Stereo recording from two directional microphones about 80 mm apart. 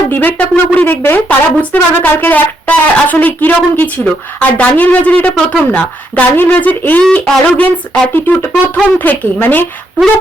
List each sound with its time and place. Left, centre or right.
0.1 s a woman's voice: left